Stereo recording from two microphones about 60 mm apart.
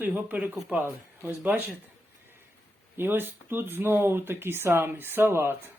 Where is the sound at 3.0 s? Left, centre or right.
Right.